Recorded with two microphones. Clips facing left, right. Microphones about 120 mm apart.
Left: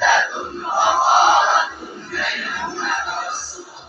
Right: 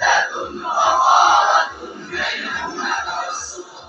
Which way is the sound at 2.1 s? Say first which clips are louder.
Even; 15° right (ahead or behind).